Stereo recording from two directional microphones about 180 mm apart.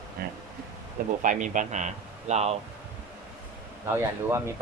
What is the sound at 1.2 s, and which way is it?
Speech, 45° right (ahead or behind).